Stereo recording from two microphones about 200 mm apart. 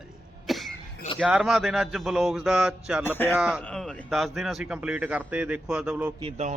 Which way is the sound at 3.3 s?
5° right (ahead or behind).